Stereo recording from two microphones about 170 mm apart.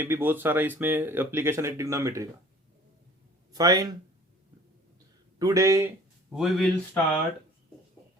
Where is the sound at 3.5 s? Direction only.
20° right (ahead or behind).